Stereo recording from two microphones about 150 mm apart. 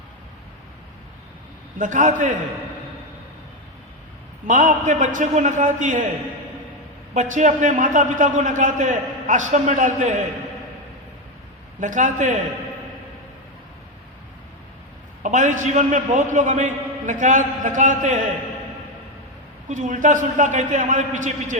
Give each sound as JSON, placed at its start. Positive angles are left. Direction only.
{"t": 1.8, "sound": "a man's voice", "side_deg": -55}
{"t": 4.4, "sound": "a man's voice", "side_deg": -55}
{"t": 7.1, "sound": "a man's voice", "side_deg": -55}
{"t": 11.8, "sound": "a man's voice", "side_deg": -55}
{"t": 15.2, "sound": "a man's voice", "side_deg": -55}
{"t": 19.6, "sound": "a man's voice", "side_deg": -55}